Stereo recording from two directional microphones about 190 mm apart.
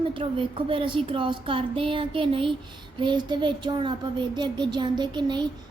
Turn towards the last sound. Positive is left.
turn(degrees=-25)  # may be behind; listen again after turning